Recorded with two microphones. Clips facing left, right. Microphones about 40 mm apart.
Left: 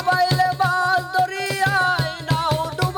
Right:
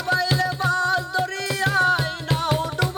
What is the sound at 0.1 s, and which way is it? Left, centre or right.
Music, centre.